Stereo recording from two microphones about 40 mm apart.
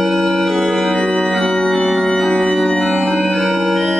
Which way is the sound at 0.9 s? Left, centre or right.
Left.